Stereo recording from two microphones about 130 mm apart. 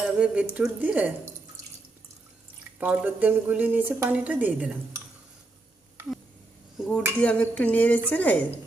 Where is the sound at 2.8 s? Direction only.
15° right (ahead or behind).